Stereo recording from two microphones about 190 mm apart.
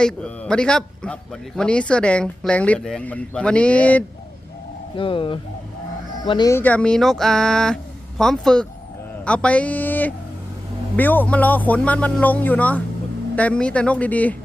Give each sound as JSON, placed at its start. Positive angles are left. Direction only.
{"t": 0.0, "sound": "a man's voice", "side_deg": 5}
{"t": 4.9, "sound": "a man's voice", "side_deg": 25}